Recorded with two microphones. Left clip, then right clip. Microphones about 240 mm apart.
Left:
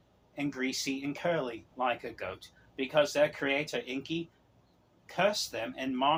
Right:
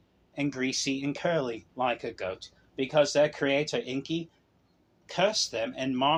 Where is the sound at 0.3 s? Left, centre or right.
Right.